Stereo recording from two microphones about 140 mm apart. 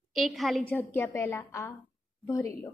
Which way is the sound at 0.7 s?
15° left (ahead or behind).